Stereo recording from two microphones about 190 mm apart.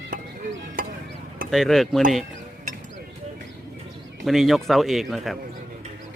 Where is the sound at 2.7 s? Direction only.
45° right (ahead or behind).